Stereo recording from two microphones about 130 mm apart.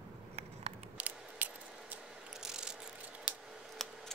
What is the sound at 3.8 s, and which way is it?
Scissors, 5° left (ahead or behind).